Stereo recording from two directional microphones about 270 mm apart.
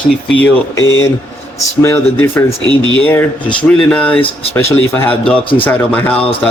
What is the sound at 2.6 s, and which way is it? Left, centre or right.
Speech, centre.